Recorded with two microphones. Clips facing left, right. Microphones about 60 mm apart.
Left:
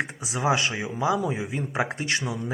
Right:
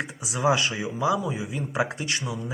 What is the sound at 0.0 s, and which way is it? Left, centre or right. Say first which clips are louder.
Speech: right 1 dB; left.